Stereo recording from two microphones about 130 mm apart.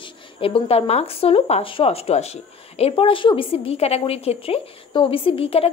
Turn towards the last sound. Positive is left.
turn(degrees=50)  # may be behind; listen again after turning